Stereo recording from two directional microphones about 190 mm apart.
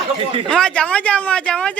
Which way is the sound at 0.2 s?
30° right (ahead or behind).